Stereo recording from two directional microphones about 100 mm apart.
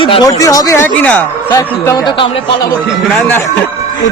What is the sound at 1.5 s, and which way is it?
Speech, 35° left (ahead or behind).